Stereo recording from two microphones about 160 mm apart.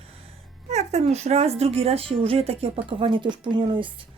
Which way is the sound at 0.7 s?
45° right (ahead or behind).